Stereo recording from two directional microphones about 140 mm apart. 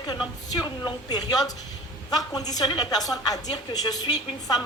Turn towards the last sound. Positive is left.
turn(degrees=30)  # may be behind; listen again after turning